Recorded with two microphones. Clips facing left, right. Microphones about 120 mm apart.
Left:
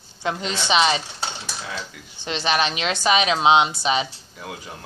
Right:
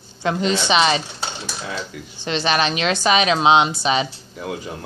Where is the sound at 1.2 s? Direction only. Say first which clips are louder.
Right 2 dB; 5° right (ahead or behind).